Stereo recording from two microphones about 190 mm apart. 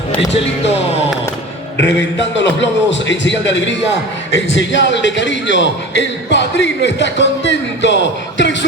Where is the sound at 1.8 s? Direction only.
70° left (ahead or behind).